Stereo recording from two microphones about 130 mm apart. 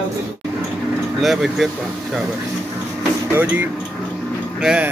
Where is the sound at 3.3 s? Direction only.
15° right (ahead or behind).